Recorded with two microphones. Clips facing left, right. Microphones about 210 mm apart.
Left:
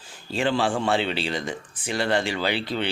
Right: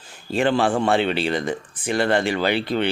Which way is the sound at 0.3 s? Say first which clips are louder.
Right 4 dB; 55° right (ahead or behind).